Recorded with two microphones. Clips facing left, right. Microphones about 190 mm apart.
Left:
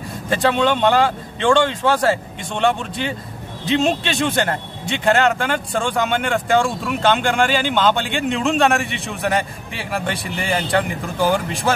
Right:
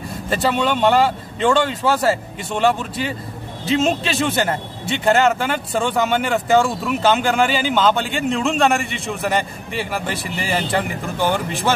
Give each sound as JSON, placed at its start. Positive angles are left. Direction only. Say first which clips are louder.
{"t": 0.3, "sound": "a man's voice", "louder": "left 2 dB", "side_deg": -5}